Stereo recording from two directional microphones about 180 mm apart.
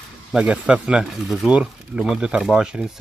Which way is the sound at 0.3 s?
5° right (ahead or behind).